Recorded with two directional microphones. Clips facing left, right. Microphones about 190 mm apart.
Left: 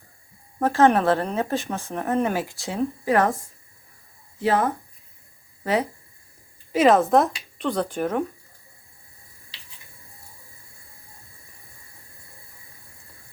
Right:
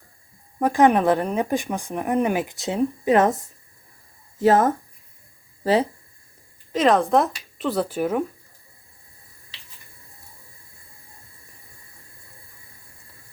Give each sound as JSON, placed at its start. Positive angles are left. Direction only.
{"t": 0.6, "sound": "speech", "side_deg": -15}
{"t": 4.4, "sound": "speech", "side_deg": -45}
{"t": 5.6, "sound": "speech", "side_deg": -30}
{"t": 6.7, "sound": "speech", "side_deg": 5}